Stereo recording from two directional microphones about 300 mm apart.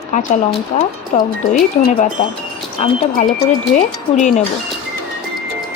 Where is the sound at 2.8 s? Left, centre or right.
Left.